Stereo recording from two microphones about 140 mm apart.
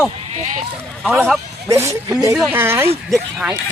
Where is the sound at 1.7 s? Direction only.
20° right (ahead or behind).